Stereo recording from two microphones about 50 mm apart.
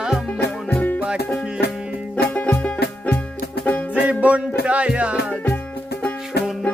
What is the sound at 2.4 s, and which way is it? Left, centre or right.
Music, left.